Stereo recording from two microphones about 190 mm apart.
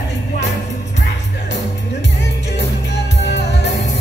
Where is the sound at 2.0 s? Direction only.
65° left (ahead or behind).